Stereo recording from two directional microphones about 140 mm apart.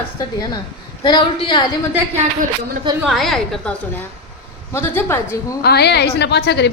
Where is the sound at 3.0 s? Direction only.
Centre (ahead or behind).